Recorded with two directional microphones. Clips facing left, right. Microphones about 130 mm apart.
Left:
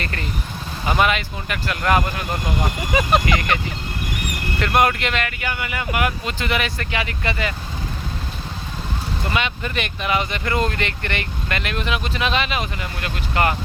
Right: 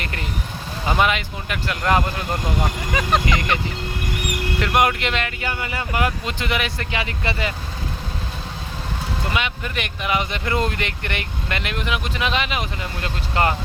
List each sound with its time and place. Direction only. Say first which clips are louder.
0.0 s speech: left 1 dB; 15° right (ahead or behind)
2.9 s speech: left 3 dB; 10° left (ahead or behind)
4.6 s speech: left 1 dB; 15° right (ahead or behind)
9.3 s speech: left 3 dB; 15° right (ahead or behind)